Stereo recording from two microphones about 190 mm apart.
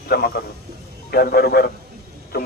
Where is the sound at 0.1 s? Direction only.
55° left (ahead or behind).